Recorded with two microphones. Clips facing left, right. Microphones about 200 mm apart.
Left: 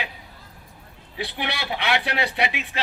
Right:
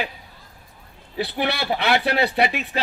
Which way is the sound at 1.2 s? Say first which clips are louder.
Right 5 dB; 35° right (ahead or behind).